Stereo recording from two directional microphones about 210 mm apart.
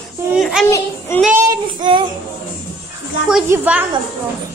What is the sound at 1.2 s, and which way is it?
Child singing, 10° right (ahead or behind).